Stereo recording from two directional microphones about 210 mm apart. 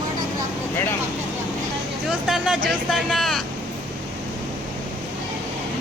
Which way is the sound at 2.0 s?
Centre (ahead or behind).